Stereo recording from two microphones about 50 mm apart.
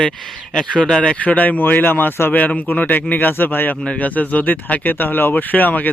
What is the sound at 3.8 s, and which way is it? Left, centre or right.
Speech, left.